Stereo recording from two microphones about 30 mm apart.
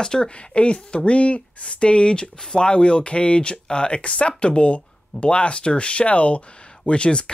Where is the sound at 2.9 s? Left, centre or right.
Left.